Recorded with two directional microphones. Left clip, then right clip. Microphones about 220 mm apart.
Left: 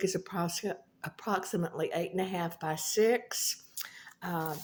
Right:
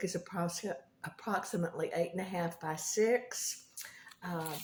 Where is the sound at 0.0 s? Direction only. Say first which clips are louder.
Left 4 dB; 35° left (ahead or behind).